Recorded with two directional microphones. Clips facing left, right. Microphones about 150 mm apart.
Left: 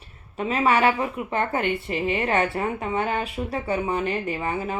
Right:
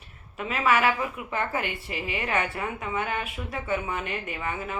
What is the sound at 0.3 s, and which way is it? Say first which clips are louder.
A woman's voice: left 3 dB; 30° left (ahead or behind).